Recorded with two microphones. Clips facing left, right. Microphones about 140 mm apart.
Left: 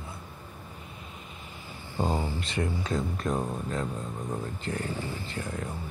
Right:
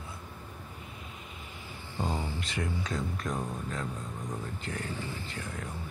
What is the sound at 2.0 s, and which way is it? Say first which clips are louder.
Speech: left 5 dB; 35° left (ahead or behind).